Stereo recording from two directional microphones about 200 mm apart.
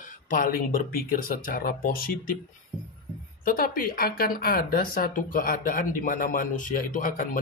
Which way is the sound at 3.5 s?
45° left (ahead or behind).